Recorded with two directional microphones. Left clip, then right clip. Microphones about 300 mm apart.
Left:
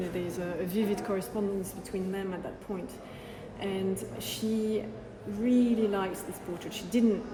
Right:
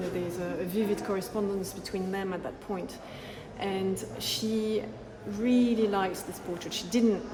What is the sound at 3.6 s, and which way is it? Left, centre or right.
Speech, centre.